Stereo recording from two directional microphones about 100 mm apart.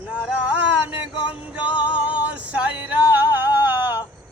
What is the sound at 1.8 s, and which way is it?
Music, 55° left (ahead or behind).